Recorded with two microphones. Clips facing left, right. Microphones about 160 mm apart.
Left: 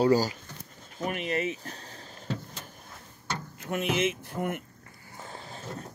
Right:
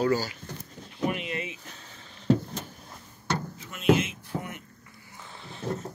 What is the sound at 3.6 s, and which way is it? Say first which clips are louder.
Speech: right 4 dB; 60° left (ahead or behind).